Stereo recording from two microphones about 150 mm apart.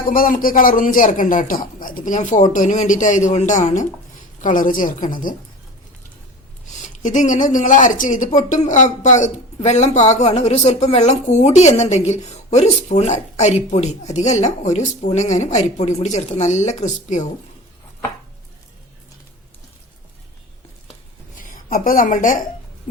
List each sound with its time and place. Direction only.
0.1 s a man's voice: 70° left (ahead or behind)
6.8 s a man's voice: 55° left (ahead or behind)
21.4 s a woman's voice: 65° left (ahead or behind)